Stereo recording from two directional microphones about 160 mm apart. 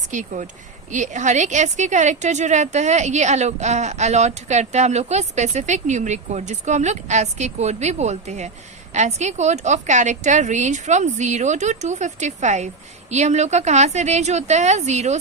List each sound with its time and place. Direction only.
0.1 s a woman's voice: 50° right (ahead or behind)